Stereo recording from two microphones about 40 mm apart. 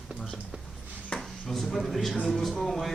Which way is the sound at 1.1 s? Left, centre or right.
Left.